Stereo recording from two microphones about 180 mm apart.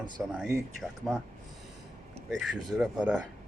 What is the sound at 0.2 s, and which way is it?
Speech, 5° right (ahead or behind).